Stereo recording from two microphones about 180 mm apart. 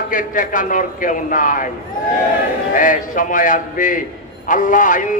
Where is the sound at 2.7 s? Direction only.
50° left (ahead or behind).